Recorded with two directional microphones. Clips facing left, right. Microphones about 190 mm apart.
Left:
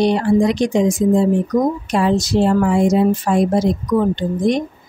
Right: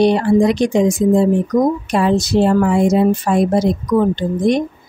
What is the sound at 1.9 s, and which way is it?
Speech, 60° right (ahead or behind).